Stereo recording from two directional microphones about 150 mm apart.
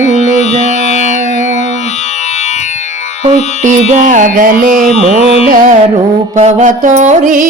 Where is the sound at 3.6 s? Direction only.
60° right (ahead or behind).